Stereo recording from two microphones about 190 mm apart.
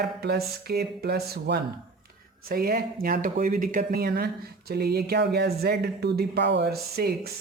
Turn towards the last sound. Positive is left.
turn(degrees=-55)  # may be behind; listen again after turning